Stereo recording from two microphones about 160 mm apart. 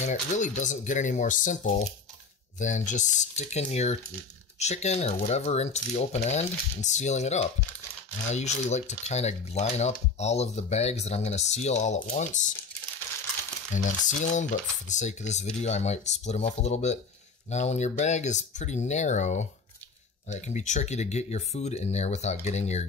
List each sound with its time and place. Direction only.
0.0 s speech: 50° left (ahead or behind)
13.7 s speech: 50° left (ahead or behind)